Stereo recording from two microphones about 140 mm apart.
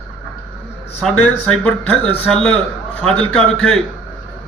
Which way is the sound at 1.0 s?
Centre (ahead or behind).